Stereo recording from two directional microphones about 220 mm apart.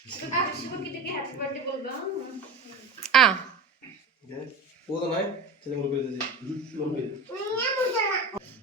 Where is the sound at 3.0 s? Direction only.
Centre (ahead or behind).